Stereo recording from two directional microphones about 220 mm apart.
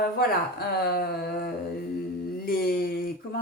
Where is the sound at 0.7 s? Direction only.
45° left (ahead or behind).